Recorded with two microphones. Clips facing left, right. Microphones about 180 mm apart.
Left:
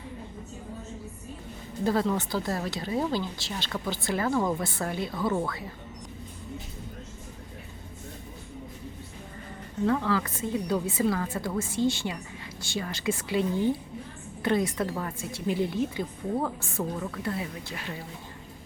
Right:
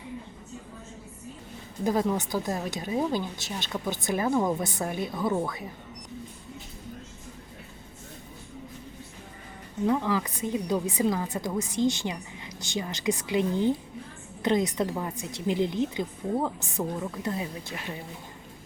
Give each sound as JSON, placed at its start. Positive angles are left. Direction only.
{"t": 1.8, "sound": "a woman's voice", "side_deg": -15}
{"t": 9.8, "sound": "a woman's voice", "side_deg": -15}